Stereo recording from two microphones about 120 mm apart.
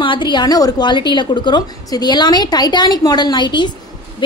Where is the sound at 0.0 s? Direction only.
40° left (ahead or behind).